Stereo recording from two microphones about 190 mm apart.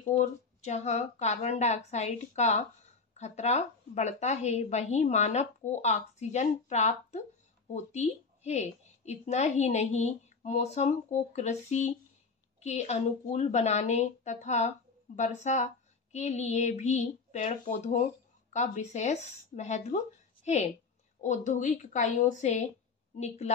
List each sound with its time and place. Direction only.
0.2 s a woman's voice: 35° left (ahead or behind)